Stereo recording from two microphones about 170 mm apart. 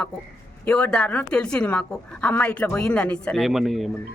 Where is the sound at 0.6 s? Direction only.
5° left (ahead or behind).